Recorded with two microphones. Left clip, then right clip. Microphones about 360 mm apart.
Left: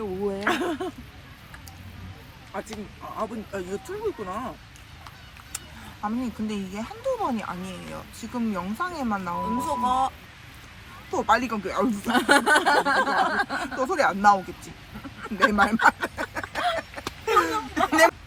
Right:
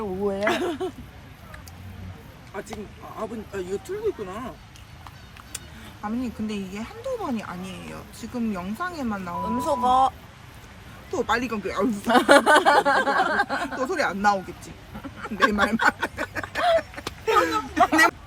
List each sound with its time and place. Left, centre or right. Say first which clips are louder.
0.3 s a sound: right 1 dB; centre
2.5 s speech: even; centre
5.5 s speech: left 2 dB; centre
9.6 s speech: right 5 dB; centre
11.1 s speech: left 2 dB; centre
12.0 s speech: right 5 dB; centre
13.0 s speech: right 1 dB; centre
13.3 s speech: right 2 dB; centre
13.7 s speech: left 4 dB; centre
15.5 s a sound: left 2 dB; centre